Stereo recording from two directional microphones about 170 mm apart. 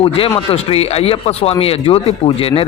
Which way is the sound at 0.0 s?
35° left (ahead or behind).